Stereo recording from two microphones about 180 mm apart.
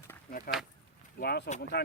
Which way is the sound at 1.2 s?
60° left (ahead or behind).